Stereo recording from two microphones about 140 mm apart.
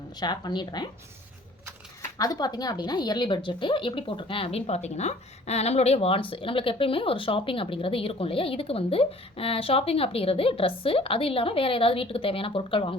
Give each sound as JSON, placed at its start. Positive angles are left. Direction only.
{"t": 0.2, "sound": "speech", "side_deg": 30}
{"t": 2.0, "sound": "speech", "side_deg": 25}